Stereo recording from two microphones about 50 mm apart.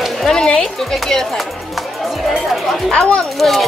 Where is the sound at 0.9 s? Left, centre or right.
Centre.